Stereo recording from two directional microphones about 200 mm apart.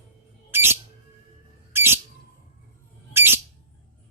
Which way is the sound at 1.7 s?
10° right (ahead or behind).